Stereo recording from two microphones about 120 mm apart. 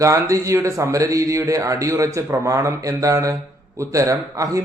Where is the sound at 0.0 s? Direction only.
25° right (ahead or behind).